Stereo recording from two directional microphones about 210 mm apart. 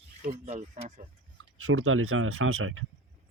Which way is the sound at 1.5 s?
75° right (ahead or behind).